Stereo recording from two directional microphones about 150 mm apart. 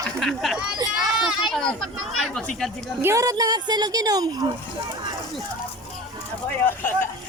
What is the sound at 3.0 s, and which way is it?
A woman's voice, 20° right (ahead or behind).